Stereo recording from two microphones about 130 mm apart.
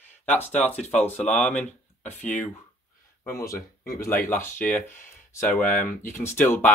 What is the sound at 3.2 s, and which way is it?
Speech, 25° left (ahead or behind).